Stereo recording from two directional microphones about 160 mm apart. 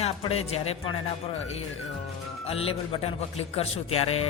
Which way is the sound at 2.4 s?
35° left (ahead or behind).